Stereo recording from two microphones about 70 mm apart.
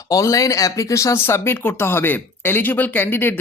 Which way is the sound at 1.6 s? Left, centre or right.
Left.